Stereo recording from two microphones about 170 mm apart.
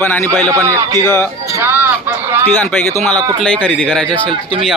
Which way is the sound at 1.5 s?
10° right (ahead or behind).